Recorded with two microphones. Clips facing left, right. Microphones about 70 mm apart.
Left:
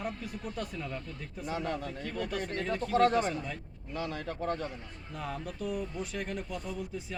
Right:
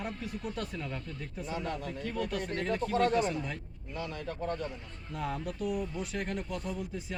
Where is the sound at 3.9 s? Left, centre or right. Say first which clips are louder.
Left 2 dB; left.